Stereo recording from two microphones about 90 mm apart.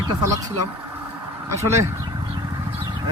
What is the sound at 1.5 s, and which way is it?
Speech, 30° right (ahead or behind).